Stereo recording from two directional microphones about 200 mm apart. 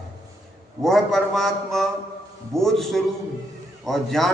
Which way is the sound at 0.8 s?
Centre (ahead or behind).